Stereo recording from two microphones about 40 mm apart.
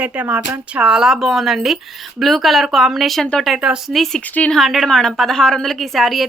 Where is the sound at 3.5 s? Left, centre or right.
Right.